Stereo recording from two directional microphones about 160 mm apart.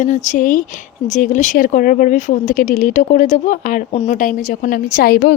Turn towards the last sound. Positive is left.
turn(degrees=65)  # may be behind; listen again after turning